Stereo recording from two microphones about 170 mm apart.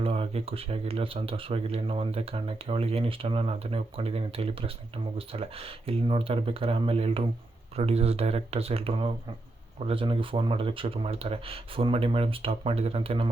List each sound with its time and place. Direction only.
0.0 s speech: 35° right (ahead or behind)